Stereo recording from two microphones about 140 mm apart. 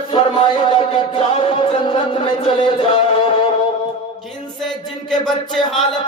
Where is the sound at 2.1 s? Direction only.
35° left (ahead or behind).